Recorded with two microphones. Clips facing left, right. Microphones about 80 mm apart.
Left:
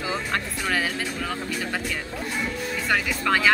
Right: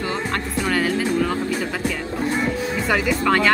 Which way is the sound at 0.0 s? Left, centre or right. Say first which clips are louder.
Right 3 dB; centre.